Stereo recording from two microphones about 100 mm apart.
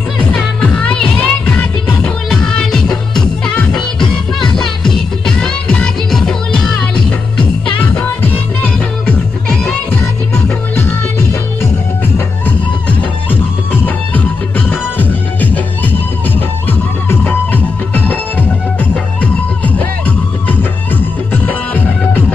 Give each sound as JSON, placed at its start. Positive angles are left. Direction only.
{"t": 0.3, "sound": "music", "side_deg": 10}
{"t": 12.4, "sound": "music", "side_deg": 20}
{"t": 20.4, "sound": "music", "side_deg": 20}